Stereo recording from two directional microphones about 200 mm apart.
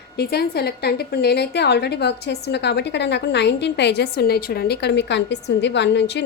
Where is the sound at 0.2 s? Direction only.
55° left (ahead or behind).